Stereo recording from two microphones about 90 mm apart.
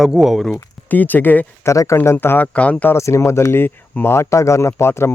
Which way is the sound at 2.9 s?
30° left (ahead or behind).